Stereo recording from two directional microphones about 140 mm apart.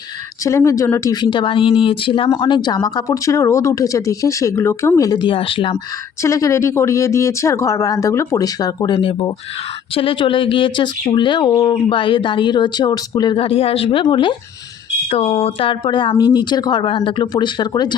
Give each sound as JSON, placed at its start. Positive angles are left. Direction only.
{"t": 0.4, "sound": "speech", "side_deg": 20}
{"t": 6.2, "sound": "speech", "side_deg": 20}